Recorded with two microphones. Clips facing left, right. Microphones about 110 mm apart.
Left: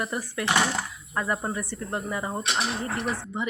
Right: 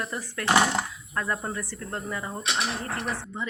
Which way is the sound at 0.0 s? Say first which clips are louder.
Left 2 dB; 10° left (ahead or behind).